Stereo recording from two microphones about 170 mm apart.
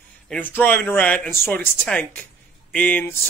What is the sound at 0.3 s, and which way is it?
Speech, 10° left (ahead or behind).